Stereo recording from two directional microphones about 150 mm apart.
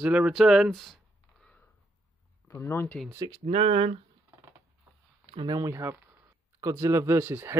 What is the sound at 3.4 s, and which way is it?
Speech, 45° right (ahead or behind).